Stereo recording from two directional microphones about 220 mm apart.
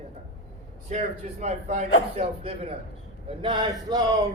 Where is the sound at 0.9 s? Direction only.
30° right (ahead or behind).